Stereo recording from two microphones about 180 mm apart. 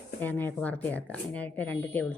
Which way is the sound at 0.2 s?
10° left (ahead or behind).